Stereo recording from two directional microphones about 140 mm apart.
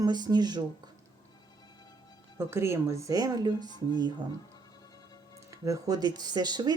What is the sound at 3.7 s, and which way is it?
Speech, 35° left (ahead or behind).